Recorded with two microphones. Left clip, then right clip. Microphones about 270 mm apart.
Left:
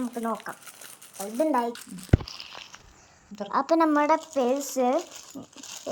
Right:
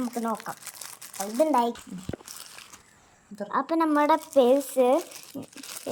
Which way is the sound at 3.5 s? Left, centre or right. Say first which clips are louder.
Left 3 dB; centre.